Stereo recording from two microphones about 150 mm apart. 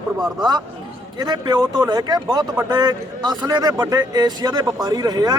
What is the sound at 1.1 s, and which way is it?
A man's voice, 30° right (ahead or behind).